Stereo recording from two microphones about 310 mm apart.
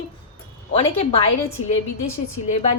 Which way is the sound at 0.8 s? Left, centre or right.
Centre.